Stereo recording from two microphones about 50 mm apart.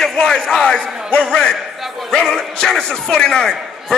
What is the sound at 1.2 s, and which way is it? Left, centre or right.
A man's voice, centre.